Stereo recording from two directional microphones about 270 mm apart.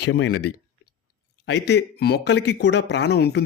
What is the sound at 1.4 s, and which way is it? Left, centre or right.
Speech, left.